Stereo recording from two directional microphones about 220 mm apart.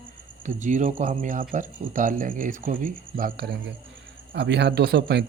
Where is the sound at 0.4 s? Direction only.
35° right (ahead or behind).